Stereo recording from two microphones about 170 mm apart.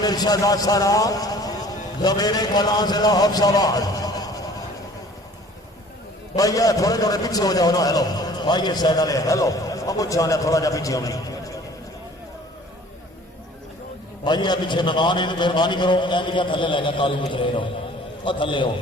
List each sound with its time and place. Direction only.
0.0 s a man's voice: 25° left (ahead or behind)
6.3 s a man's voice: 20° left (ahead or behind)
14.3 s a man's voice: 25° left (ahead or behind)